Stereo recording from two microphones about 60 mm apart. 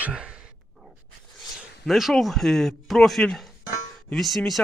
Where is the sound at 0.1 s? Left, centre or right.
Centre.